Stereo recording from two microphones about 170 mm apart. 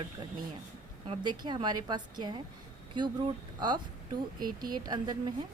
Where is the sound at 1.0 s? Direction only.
25° right (ahead or behind).